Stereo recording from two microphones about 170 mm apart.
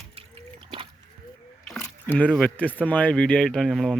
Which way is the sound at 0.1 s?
35° right (ahead or behind).